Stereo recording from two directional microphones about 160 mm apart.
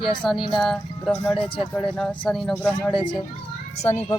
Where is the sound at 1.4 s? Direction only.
35° left (ahead or behind).